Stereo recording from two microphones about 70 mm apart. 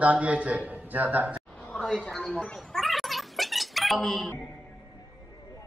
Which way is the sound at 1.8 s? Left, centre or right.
Centre.